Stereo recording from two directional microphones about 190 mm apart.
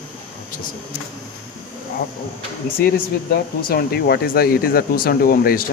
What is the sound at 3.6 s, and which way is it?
Speech, 55° left (ahead or behind).